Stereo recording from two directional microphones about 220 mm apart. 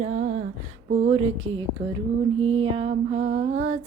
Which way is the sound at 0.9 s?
30° right (ahead or behind).